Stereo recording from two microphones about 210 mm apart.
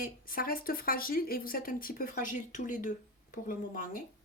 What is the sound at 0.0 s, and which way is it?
Speech, 45° left (ahead or behind).